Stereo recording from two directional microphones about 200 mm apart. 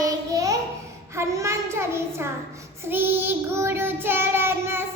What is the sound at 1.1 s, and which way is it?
Child singing, 15° right (ahead or behind).